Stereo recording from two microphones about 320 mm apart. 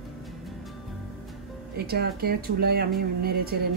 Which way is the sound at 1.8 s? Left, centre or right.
Right.